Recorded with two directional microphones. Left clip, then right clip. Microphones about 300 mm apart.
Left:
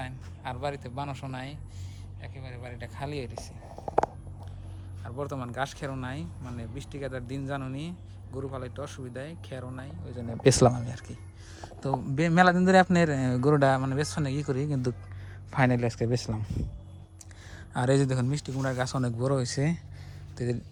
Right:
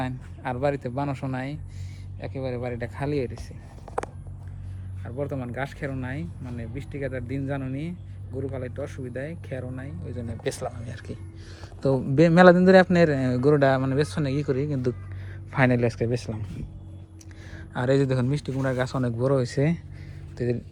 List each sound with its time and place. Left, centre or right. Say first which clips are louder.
0.0 s speech: right 7 dB; centre
5.0 s a man's voice: right 4 dB; centre
10.4 s speech: left 10 dB; left
10.9 s a man's voice: right 5 dB; centre
17.5 s a man's voice: right 3 dB; centre